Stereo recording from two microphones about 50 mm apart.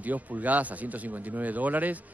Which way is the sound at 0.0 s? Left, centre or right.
Right.